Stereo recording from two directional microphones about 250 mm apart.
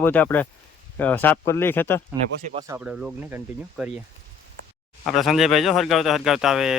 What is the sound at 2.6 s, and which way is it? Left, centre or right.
Speech, centre.